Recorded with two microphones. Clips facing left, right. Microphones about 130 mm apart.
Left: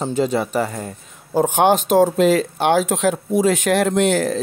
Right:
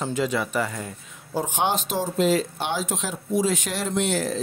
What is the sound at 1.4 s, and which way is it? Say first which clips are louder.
A man's voice: left 10 dB; 55° left (ahead or behind).